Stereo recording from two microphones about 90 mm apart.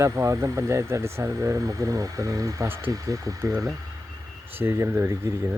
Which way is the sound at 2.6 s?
25° right (ahead or behind).